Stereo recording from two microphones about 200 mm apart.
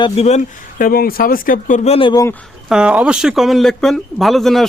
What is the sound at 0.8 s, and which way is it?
Speech, 50° left (ahead or behind).